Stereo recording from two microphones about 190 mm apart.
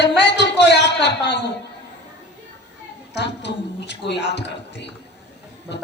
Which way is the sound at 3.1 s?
65° left (ahead or behind).